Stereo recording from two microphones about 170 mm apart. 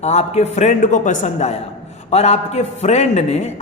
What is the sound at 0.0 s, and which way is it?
A man's voice, 40° left (ahead or behind).